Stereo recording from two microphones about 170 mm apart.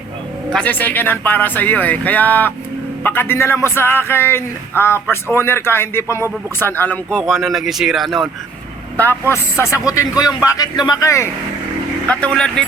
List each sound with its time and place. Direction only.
0.5 s a man's voice: 10° left (ahead or behind)
12.0 s speech: 5° left (ahead or behind)